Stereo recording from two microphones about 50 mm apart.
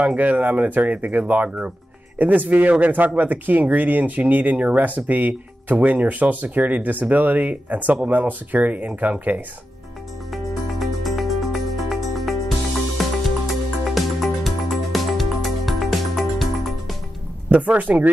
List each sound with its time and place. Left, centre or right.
0.0 s speech: right
10.3 s music: centre
17.5 s speech: right